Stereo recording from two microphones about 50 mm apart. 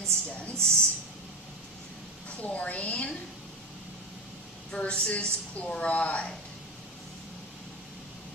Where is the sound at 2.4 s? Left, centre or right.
Left.